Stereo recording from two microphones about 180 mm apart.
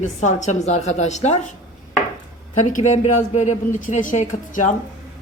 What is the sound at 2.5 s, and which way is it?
A woman's voice, 45° left (ahead or behind).